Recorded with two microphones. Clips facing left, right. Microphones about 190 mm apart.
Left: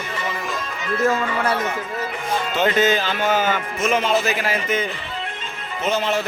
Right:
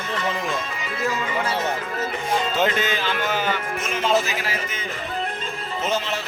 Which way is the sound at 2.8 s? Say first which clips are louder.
Left 6 dB; 45° left (ahead or behind).